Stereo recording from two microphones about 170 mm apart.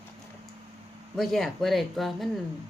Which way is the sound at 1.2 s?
Centre (ahead or behind).